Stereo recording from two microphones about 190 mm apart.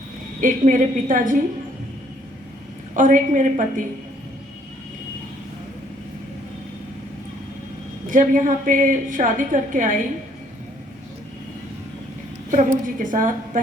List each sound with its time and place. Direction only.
0.3 s a woman's voice: 45° right (ahead or behind)
2.9 s a woman's voice: 45° right (ahead or behind)
8.0 s a woman's voice: 45° right (ahead or behind)
12.5 s a woman's voice: 45° right (ahead or behind)